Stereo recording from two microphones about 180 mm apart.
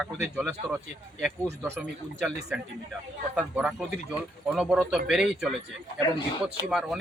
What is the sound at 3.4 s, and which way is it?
Speech, 10° right (ahead or behind).